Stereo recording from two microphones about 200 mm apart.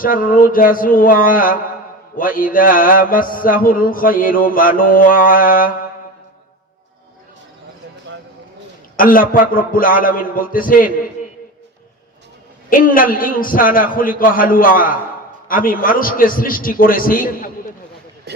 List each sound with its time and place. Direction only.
0.0 s mantra: 45° left (ahead or behind)
9.0 s a man's voice: 45° left (ahead or behind)
9.3 s mantra: 45° left (ahead or behind)
12.7 s mantra: 45° left (ahead or behind)
18.3 s a sound: 55° right (ahead or behind)